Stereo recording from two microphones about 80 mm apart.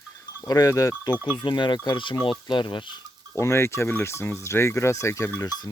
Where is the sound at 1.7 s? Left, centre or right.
Left.